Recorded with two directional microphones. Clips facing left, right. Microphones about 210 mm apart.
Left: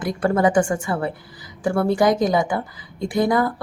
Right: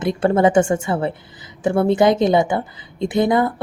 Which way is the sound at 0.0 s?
25° right (ahead or behind).